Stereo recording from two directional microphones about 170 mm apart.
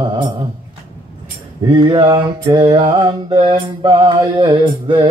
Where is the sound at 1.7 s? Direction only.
25° right (ahead or behind).